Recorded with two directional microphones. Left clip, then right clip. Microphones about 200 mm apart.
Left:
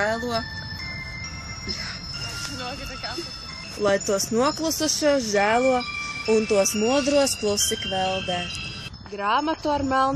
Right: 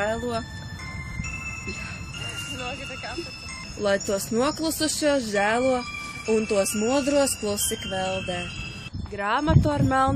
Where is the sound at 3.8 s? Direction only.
20° left (ahead or behind).